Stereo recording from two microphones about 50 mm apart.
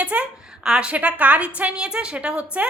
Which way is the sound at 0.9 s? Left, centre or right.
Right.